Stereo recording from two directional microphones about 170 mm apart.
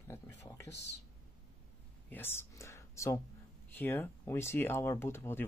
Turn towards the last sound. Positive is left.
turn(degrees=15)  # may be behind; listen again after turning